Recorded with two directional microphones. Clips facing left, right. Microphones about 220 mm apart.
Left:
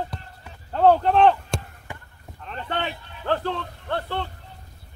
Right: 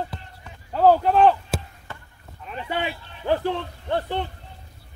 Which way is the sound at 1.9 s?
15° left (ahead or behind).